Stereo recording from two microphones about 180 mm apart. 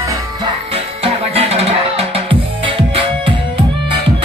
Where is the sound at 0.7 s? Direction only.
35° right (ahead or behind).